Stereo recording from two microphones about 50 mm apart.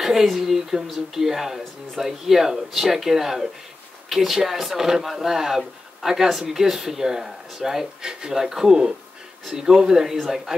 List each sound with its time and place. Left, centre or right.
0.0 s speech: centre